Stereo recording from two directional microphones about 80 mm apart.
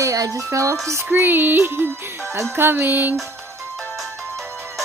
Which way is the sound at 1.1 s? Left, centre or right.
Right.